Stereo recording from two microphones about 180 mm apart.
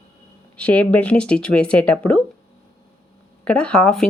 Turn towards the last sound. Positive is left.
turn(degrees=5)  # may be behind; listen again after turning